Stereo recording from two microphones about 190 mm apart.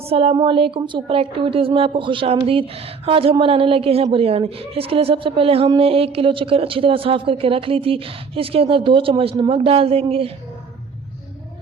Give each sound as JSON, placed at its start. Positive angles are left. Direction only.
{"t": 0.0, "sound": "speech", "side_deg": -30}